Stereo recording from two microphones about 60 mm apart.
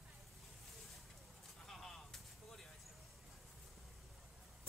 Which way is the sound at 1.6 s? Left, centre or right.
Centre.